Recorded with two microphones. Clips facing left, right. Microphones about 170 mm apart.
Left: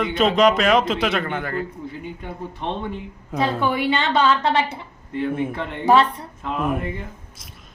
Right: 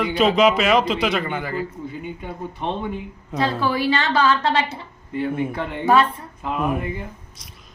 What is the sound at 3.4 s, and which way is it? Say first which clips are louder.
Speech: even; 20° left (ahead or behind).